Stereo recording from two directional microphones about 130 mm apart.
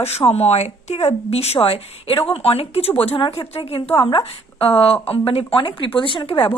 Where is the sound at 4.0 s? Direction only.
40° left (ahead or behind).